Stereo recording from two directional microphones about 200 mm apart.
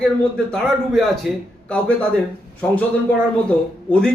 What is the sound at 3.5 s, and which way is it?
Speech, 5° left (ahead or behind).